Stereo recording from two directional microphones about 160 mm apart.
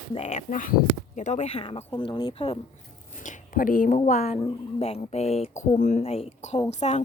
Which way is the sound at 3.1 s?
50° left (ahead or behind).